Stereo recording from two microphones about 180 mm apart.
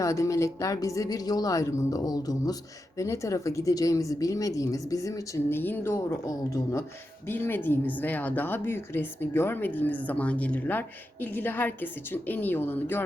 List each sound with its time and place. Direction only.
0.0 s a woman's voice: 15° left (ahead or behind)